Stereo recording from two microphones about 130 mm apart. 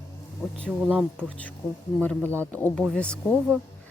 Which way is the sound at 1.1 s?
10° left (ahead or behind).